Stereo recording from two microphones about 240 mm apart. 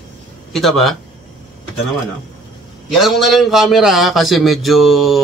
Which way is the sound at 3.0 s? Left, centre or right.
Centre.